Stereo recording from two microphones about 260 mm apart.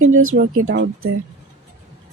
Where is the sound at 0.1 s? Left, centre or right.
Right.